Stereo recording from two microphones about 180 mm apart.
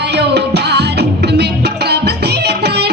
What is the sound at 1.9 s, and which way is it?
Music, 65° right (ahead or behind).